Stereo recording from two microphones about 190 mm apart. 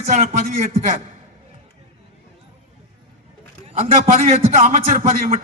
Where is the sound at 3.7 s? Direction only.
35° right (ahead or behind).